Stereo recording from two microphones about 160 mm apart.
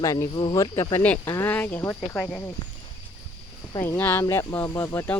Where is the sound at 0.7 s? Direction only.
15° left (ahead or behind).